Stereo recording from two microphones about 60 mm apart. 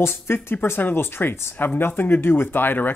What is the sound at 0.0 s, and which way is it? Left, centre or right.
Speech, left.